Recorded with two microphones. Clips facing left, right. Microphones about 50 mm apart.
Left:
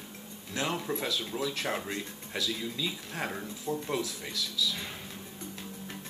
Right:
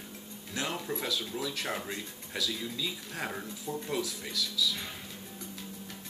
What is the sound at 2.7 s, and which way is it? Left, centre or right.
Speech, centre.